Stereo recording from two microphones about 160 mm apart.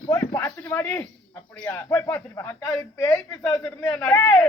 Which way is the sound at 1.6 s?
15° left (ahead or behind).